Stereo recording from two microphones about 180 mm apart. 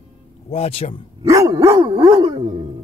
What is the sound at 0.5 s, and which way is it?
Speech, 35° left (ahead or behind).